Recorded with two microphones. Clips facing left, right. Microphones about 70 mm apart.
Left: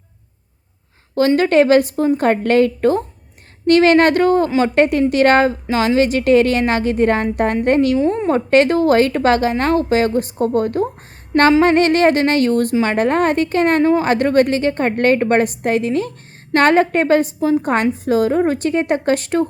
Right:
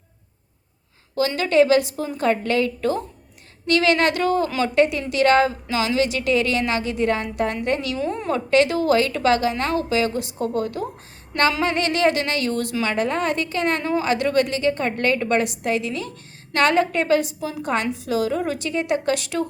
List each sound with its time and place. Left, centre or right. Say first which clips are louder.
1.4 s a woman's voice: left 3 dB; left
7.9 s a woman's voice: left 8 dB; left